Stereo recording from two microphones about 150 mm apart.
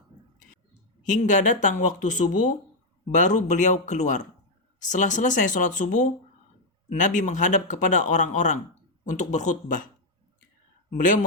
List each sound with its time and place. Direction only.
1.0 s speech: 55° left (ahead or behind)
10.9 s speech: 60° left (ahead or behind)